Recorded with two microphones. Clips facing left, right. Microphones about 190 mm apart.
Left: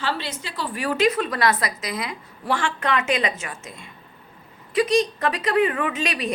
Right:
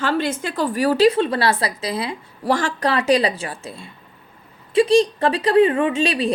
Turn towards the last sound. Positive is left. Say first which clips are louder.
# right 6 dB
turn(degrees=-30)  # may be behind; listen again after turning